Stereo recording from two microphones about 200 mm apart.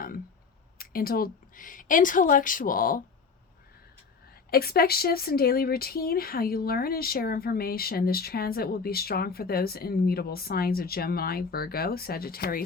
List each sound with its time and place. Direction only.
0.8 s speech: 50° left (ahead or behind)
4.5 s speech: 50° left (ahead or behind)